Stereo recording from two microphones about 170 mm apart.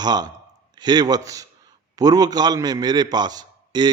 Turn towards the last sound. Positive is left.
turn(degrees=-25)  # may be behind; listen again after turning